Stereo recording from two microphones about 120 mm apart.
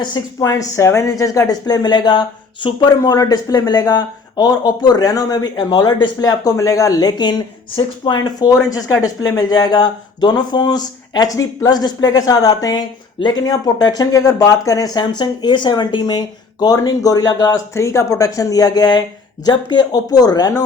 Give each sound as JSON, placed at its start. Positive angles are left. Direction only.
{"t": 0.0, "sound": "speech", "side_deg": 35}